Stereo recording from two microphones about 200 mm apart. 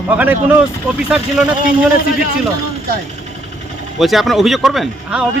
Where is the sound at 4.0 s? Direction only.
Centre (ahead or behind).